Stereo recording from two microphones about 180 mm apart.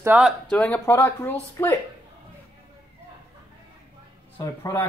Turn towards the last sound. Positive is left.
turn(degrees=15)  # may be behind; listen again after turning